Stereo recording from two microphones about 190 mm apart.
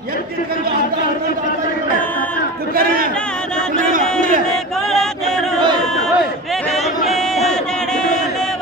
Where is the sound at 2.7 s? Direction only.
50° right (ahead or behind).